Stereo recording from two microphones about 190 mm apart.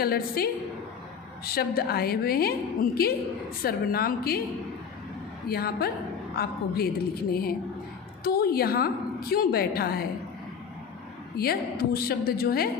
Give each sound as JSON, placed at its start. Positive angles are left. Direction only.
{"t": 0.0, "sound": "a woman's voice", "side_deg": 55}
{"t": 5.5, "sound": "a woman's voice", "side_deg": 55}
{"t": 11.3, "sound": "a woman's voice", "side_deg": 55}